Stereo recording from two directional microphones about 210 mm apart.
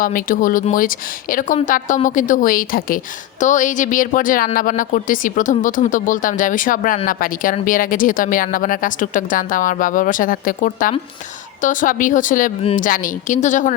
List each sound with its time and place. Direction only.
0.0 s speech: 40° left (ahead or behind)